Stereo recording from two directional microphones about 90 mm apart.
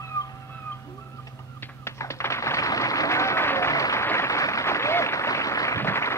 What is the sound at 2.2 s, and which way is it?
Applause, 35° left (ahead or behind).